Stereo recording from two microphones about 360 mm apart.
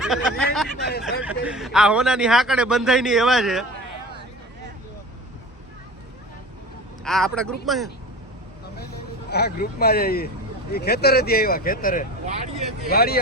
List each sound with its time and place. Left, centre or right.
0.0 s a man's voice: centre
7.0 s a man's voice: centre
9.3 s speech: left
12.2 s speech: centre
12.9 s speech: left